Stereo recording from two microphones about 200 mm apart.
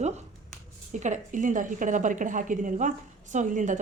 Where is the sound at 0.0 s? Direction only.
35° right (ahead or behind).